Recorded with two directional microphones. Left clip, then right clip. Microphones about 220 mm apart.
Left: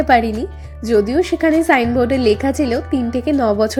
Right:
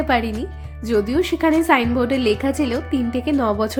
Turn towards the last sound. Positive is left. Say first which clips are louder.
# left 4 dB
turn(degrees=10)  # may be behind; listen again after turning